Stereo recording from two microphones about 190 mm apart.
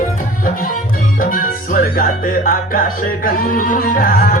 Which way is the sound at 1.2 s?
45° left (ahead or behind).